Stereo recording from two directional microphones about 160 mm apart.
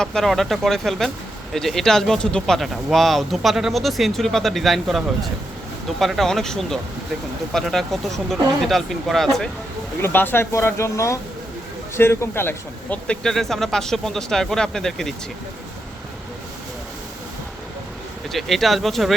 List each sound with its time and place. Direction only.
0.0 s speech: 5° left (ahead or behind)
10.0 s speech: 15° left (ahead or behind)
18.3 s speech: centre (ahead or behind)